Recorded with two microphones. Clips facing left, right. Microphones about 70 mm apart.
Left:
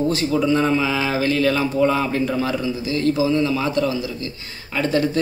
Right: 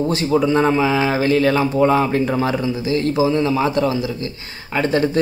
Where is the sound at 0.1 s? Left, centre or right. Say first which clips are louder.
Right 2 dB; right.